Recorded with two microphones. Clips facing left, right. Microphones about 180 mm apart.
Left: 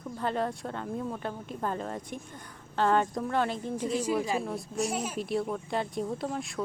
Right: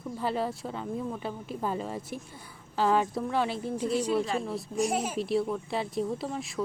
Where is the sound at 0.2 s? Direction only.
5° right (ahead or behind).